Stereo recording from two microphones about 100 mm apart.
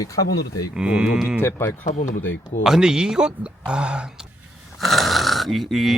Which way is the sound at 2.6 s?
5° right (ahead or behind).